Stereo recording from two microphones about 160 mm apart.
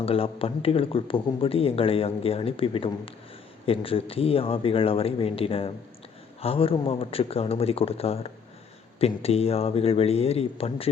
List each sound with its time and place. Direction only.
0.0 s speech: 35° left (ahead or behind)